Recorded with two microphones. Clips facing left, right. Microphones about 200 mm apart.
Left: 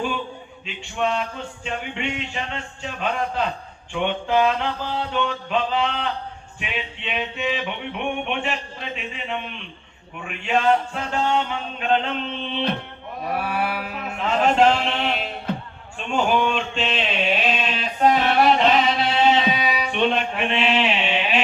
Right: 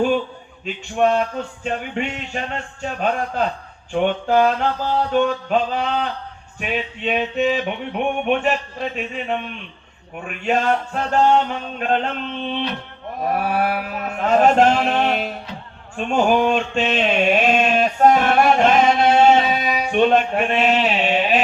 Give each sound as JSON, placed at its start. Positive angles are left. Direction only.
{"t": 0.6, "sound": "music", "side_deg": -45}
{"t": 13.3, "sound": "music", "side_deg": -45}
{"t": 15.5, "sound": "music", "side_deg": 55}
{"t": 16.0, "sound": "a sound", "side_deg": -45}